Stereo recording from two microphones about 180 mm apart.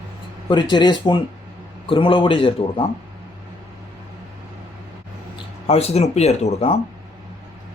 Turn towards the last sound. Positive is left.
turn(degrees=35)  # may be behind; listen again after turning